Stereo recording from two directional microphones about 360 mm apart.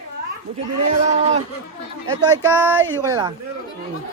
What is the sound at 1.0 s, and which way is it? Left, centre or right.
Speech, centre.